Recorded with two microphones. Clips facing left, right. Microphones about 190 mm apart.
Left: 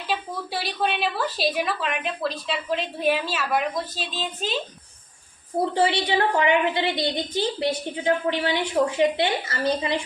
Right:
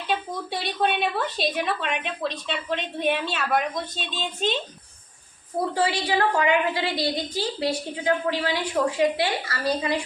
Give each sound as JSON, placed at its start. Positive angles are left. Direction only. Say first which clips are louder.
{"t": 0.1, "sound": "a woman's voice", "louder": "right 1 dB", "side_deg": 5}
{"t": 5.7, "sound": "a woman's voice", "louder": "left 2 dB", "side_deg": 25}